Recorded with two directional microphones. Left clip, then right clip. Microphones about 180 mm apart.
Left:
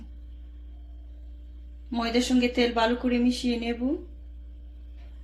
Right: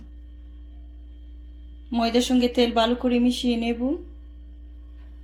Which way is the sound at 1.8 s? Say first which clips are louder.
Right 4 dB; 30° right (ahead or behind).